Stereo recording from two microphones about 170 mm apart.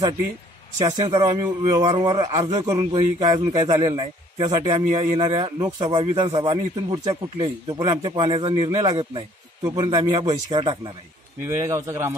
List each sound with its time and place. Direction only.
0.7 s a man's voice: 20° right (ahead or behind)
11.4 s speech: 15° right (ahead or behind)